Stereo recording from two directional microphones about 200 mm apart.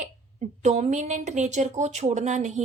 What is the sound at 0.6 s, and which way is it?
Speech, 35° right (ahead or behind).